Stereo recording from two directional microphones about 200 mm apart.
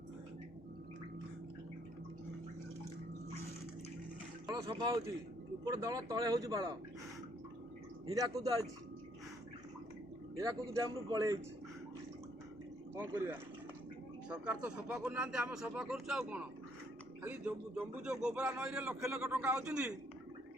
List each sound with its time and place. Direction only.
4.4 s speech: 20° right (ahead or behind)
8.1 s speech: 15° right (ahead or behind)
10.3 s speech: 15° right (ahead or behind)
13.0 s a man's voice: 10° right (ahead or behind)